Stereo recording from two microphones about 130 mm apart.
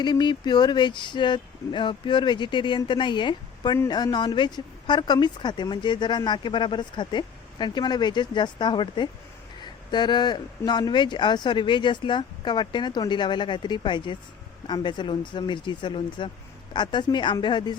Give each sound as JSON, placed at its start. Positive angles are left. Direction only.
{"t": 0.0, "sound": "speech", "side_deg": 35}